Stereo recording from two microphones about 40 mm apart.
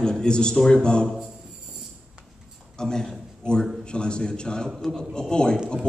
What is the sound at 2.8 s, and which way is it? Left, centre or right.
A man's voice, centre.